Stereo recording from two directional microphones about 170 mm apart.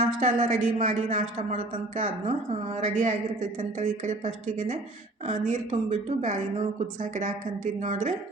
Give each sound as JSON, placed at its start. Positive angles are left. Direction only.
{"t": 0.2, "sound": "a woman's voice", "side_deg": -45}